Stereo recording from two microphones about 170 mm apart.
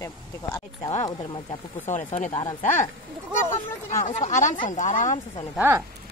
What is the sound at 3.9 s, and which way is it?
Speech, 45° left (ahead or behind).